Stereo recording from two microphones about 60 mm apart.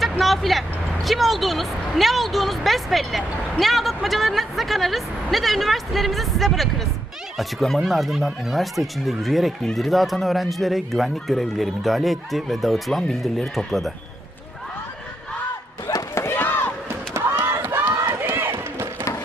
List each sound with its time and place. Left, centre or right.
0.0 s vehicle: centre
1.0 s a woman's voice: centre
16.1 s a sound: left
16.4 s chop: left
16.9 s a sound: right
17.7 s run: right